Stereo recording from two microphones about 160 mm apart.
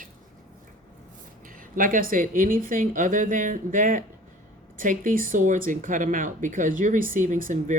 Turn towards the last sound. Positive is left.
turn(degrees=-55)  # may be behind; listen again after turning